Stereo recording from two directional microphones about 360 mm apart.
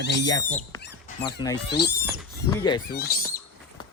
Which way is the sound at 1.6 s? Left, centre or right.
Left.